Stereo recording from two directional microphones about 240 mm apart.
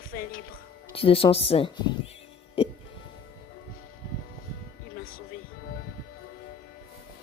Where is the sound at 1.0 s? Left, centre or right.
Left.